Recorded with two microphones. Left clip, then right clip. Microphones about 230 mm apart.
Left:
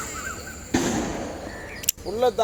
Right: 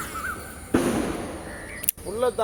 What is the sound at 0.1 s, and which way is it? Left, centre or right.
Crow, centre.